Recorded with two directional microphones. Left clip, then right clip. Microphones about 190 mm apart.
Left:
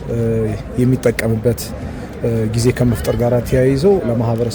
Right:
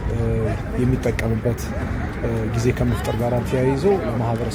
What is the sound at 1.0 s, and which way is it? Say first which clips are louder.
Speech: left 7 dB; 55° left (ahead or behind).